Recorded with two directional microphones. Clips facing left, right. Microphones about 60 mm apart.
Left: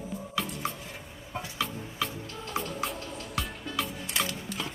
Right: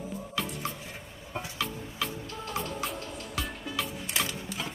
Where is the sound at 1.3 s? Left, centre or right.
Centre.